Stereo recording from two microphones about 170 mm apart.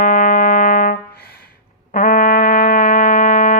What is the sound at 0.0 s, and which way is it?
Music, 50° left (ahead or behind).